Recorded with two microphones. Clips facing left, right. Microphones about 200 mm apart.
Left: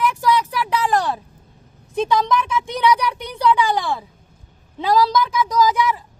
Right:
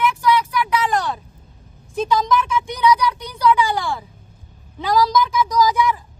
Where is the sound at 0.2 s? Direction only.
40° left (ahead or behind).